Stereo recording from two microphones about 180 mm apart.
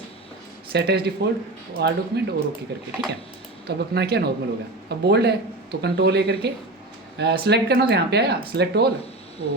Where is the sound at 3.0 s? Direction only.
65° right (ahead or behind).